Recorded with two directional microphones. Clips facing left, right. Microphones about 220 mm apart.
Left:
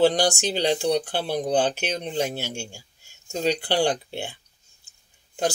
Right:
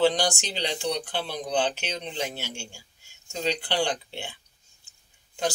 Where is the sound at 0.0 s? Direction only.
45° left (ahead or behind).